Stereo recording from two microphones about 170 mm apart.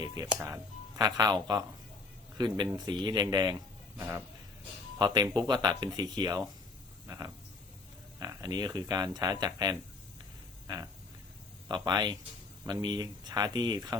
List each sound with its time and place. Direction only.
0.3 s speech: 15° right (ahead or behind)
11.7 s speech: 25° right (ahead or behind)